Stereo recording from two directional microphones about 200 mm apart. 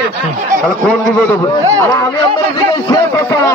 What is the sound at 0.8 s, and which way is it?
Speech, 5° left (ahead or behind).